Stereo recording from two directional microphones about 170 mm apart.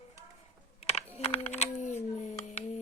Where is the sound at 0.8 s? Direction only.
40° left (ahead or behind).